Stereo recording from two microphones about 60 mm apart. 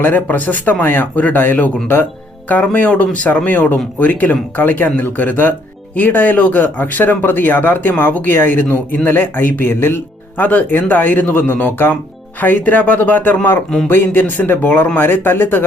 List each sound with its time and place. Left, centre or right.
0.0 s speech: left